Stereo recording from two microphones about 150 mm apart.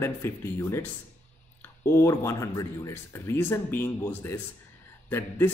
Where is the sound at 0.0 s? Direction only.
15° left (ahead or behind).